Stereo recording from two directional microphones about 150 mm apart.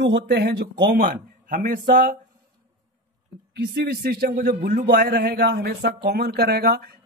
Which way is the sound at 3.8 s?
90° right.